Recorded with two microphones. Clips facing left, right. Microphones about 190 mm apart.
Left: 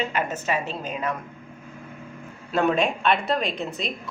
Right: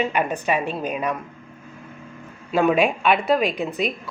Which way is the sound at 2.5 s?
10° right (ahead or behind).